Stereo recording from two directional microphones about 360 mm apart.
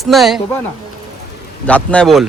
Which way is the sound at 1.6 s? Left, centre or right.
Centre.